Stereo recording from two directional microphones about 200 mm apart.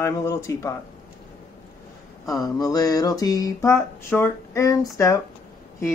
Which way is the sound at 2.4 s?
20° left (ahead or behind).